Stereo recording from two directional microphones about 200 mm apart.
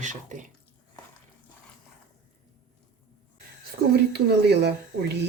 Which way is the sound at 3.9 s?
55° right (ahead or behind).